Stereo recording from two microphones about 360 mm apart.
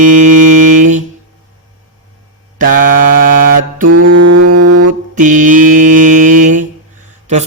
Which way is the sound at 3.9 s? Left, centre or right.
Right.